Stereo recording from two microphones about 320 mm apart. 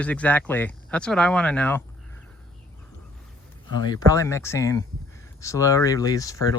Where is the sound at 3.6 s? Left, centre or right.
Centre.